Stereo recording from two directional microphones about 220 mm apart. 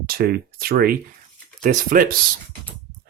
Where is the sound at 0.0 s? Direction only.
45° right (ahead or behind).